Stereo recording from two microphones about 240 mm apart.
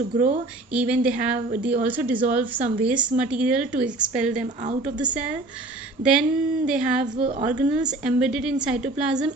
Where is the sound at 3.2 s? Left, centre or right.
Centre.